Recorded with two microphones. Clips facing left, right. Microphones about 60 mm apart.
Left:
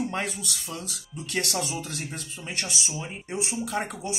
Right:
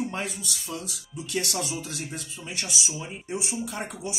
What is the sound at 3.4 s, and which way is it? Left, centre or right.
Speech, left.